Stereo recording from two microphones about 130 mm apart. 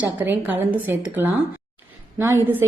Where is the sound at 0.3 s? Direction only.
15° right (ahead or behind).